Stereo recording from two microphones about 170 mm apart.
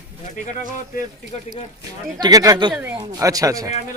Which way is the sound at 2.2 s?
20° right (ahead or behind).